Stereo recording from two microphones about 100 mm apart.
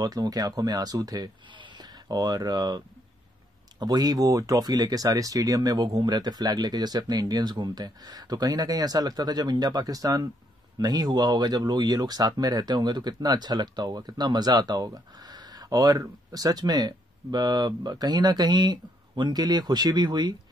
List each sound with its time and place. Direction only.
0.0 s speech: 40° right (ahead or behind)
1.5 s speech: 50° right (ahead or behind)
3.8 s speech: 40° right (ahead or behind)